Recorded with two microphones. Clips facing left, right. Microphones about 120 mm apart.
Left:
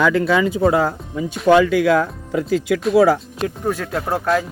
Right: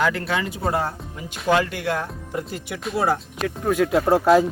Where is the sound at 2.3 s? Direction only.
90° left.